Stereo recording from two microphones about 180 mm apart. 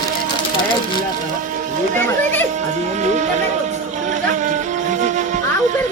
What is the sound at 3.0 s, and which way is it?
Music, 40° right (ahead or behind).